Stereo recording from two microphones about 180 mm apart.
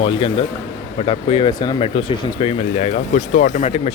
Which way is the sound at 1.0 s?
30° left (ahead or behind).